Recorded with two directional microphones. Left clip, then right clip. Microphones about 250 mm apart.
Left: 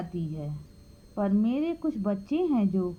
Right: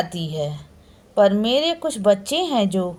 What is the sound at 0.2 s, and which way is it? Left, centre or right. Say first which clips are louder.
A woman's voice: right 12 dB; centre.